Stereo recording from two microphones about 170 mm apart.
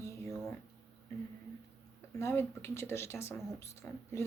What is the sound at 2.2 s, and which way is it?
Speech, 15° left (ahead or behind).